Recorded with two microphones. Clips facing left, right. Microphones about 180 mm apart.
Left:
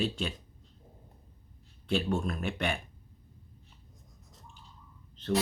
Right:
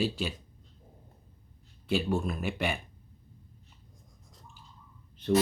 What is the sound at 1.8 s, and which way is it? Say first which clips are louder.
Speech: right 1 dB; 5° right (ahead or behind).